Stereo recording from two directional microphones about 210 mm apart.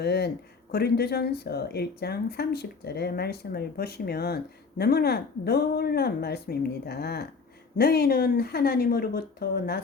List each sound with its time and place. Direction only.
0.0 s speech: 50° left (ahead or behind)